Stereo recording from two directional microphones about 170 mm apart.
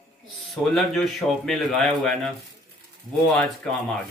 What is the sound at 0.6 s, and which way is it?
Speech, centre (ahead or behind).